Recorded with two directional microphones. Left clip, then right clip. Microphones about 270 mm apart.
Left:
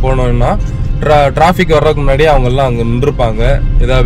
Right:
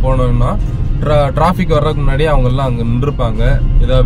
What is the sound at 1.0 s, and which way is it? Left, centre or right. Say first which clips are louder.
Speech: left 5 dB; centre.